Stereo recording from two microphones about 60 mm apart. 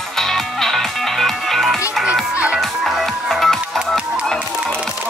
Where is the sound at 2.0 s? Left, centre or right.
Right.